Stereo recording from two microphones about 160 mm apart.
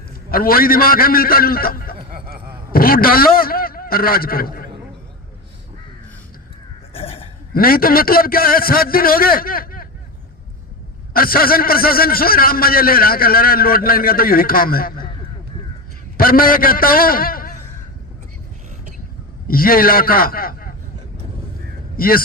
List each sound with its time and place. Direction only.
0.3 s a man's voice: 65° left (ahead or behind)
6.9 s a sound: 35° left (ahead or behind)
7.5 s a man's voice: 65° left (ahead or behind)
11.1 s a man's voice: 65° left (ahead or behind)
16.1 s a man's voice: 65° left (ahead or behind)
19.5 s a man's voice: 65° left (ahead or behind)
21.9 s speech: 65° left (ahead or behind)